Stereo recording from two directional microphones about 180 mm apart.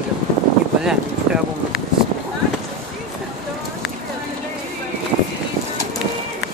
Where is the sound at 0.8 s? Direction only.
5° right (ahead or behind).